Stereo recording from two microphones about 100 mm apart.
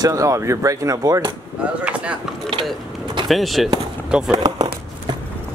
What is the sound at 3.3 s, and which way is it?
Speech, centre (ahead or behind).